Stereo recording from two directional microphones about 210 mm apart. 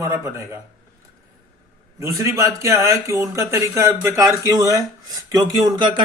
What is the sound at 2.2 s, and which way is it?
Speech, 15° right (ahead or behind).